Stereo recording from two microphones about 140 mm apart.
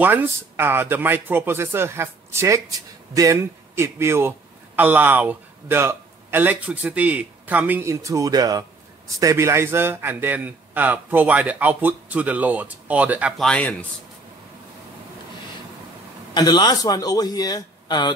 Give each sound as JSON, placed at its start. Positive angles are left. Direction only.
{"t": 0.0, "sound": "a man's voice", "side_deg": -15}
{"t": 13.4, "sound": "speech", "side_deg": 5}
{"t": 16.3, "sound": "a man's voice", "side_deg": 30}